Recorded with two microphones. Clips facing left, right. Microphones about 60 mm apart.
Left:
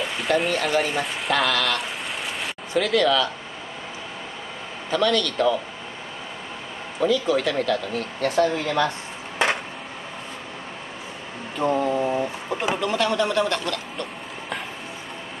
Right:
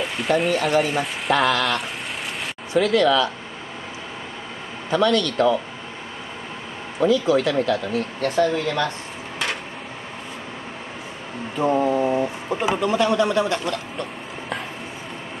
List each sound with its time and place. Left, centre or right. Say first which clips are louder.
0.0 s speech: right 2 dB; centre
4.9 s a man's voice: right 2 dB; centre
7.0 s a man's voice: right 3 dB; centre
8.2 s speech: even; centre
9.4 s a sound: left 5 dB; left
11.6 s speech: right 2 dB; centre
12.8 s a man's voice: right 4 dB; centre